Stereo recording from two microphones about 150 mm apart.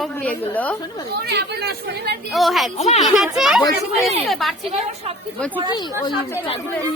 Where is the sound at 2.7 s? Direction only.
45° left (ahead or behind).